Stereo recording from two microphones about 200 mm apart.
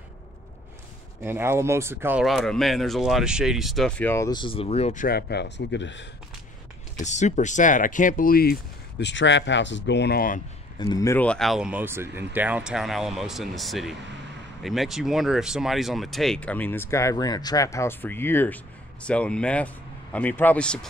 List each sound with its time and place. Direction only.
1.2 s speech: 10° right (ahead or behind); by 5.0 s 30° left (ahead or behind)
5.0 s speech: 55° left (ahead or behind)
7.0 s speech: 35° left (ahead or behind)
10.8 s speech: 15° left (ahead or behind)